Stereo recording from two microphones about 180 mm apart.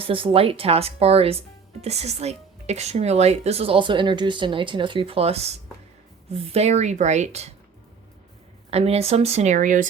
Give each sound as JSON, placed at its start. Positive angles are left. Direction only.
{"t": 0.1, "sound": "speech", "side_deg": -30}
{"t": 8.7, "sound": "speech", "side_deg": -35}